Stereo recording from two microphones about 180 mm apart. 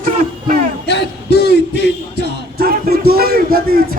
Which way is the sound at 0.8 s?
65° left (ahead or behind).